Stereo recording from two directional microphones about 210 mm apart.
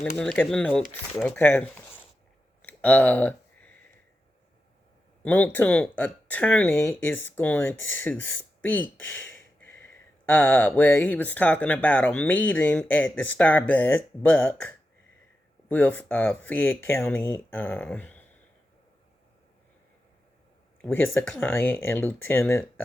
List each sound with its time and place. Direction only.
0.0 s speech: 5° left (ahead or behind)
2.6 s a sound: 5° left (ahead or behind)
5.2 s speech: 5° left (ahead or behind)
15.7 s speech: 10° left (ahead or behind)
20.8 s speech: 10° left (ahead or behind)